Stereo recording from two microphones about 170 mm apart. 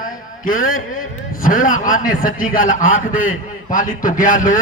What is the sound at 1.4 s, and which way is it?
A man's voice, 50° left (ahead or behind).